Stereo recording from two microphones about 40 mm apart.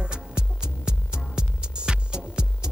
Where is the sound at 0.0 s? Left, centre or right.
Right.